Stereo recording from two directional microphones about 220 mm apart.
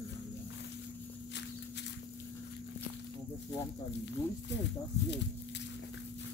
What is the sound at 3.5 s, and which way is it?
Snake, 55° left (ahead or behind).